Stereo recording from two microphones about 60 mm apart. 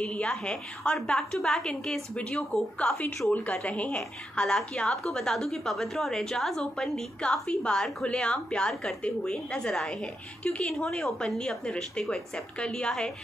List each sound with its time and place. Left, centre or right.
0.0 s a woman's voice: centre
3.6 s a woman's voice: left
4.4 s a woman's voice: centre